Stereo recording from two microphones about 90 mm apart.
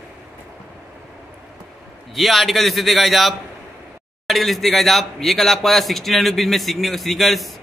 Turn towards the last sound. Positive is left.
turn(degrees=0)  # may be behind; listen again after turning